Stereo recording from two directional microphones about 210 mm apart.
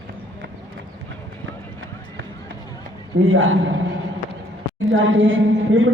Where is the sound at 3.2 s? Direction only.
65° right (ahead or behind).